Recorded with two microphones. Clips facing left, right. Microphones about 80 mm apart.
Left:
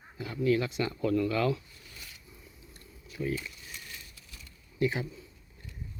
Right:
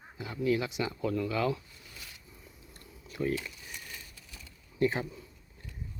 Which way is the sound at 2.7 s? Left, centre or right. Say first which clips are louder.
Right 3 dB; right.